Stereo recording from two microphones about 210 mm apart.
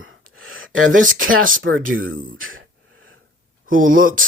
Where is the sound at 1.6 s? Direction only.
70° right (ahead or behind).